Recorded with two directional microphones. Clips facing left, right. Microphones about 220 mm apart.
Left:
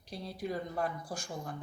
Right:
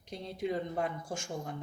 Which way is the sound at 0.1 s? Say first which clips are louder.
Right 3 dB; 20° right (ahead or behind).